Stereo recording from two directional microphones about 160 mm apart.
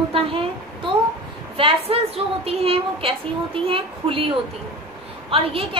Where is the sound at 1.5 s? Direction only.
35° right (ahead or behind).